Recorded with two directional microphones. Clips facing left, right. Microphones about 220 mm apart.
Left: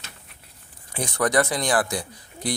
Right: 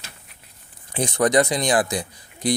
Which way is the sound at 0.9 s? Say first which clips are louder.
Right 4 dB; 20° right (ahead or behind).